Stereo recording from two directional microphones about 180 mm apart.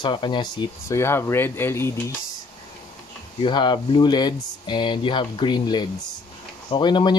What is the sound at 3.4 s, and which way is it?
Speech, 25° left (ahead or behind).